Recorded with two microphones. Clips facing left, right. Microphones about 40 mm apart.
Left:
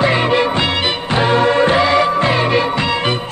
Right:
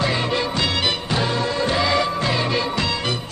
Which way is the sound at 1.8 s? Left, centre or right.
Left.